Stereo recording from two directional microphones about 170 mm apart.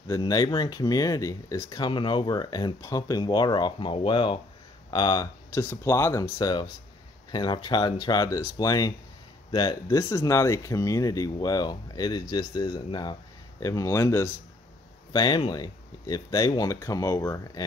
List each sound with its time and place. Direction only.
0.1 s speech: 20° left (ahead or behind)